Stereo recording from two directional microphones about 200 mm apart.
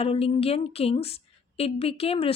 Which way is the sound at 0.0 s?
30° left (ahead or behind).